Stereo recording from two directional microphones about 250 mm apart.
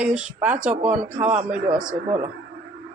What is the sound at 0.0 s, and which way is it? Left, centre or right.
Speech, centre.